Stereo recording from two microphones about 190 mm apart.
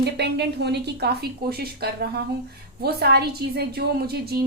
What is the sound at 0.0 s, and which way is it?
A woman's voice, 60° right (ahead or behind).